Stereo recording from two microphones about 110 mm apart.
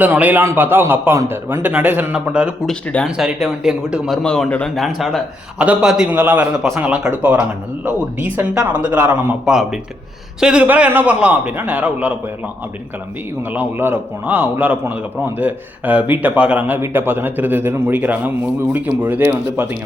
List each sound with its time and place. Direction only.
0.0 s speech: 15° right (ahead or behind)
2.6 s speech: 5° left (ahead or behind)
4.2 s speech: 5° left (ahead or behind)
6.1 s speech: 15° right (ahead or behind)
13.5 s speech: 20° right (ahead or behind)